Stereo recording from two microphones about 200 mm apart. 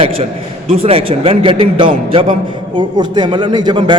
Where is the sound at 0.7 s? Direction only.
30° right (ahead or behind).